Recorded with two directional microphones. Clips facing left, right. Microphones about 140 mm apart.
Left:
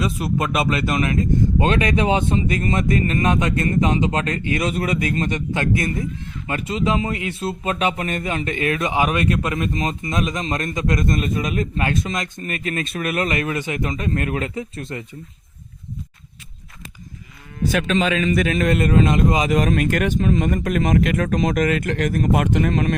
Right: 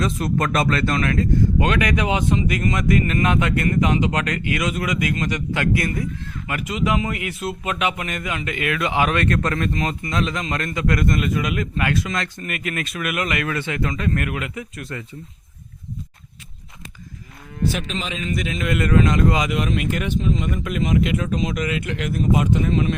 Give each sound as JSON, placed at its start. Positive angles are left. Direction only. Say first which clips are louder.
{"t": 0.0, "sound": "speech", "louder": "even", "side_deg": 5}
{"t": 8.9, "sound": "speech", "louder": "right 2 dB", "side_deg": 15}
{"t": 12.4, "sound": "speech", "louder": "left 2 dB", "side_deg": 30}
{"t": 17.8, "sound": "speech", "louder": "left 8 dB", "side_deg": 60}
{"t": 18.8, "sound": "speech", "louder": "right 3 dB", "side_deg": 25}
{"t": 19.5, "sound": "speech", "louder": "left 4 dB", "side_deg": 45}
{"t": 22.2, "sound": "speech", "louder": "right 1 dB", "side_deg": 60}